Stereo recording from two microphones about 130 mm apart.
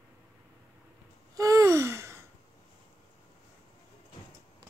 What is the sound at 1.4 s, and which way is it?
Gasp, 25° right (ahead or behind).